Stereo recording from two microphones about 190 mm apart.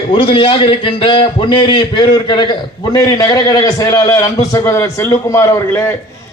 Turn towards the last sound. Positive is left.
turn(degrees=15)  # may be behind; listen again after turning